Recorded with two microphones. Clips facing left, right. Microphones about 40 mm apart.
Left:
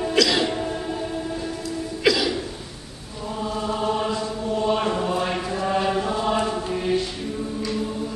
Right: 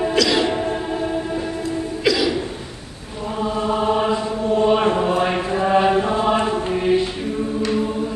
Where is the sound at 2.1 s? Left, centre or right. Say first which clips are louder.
Right 2 dB; centre.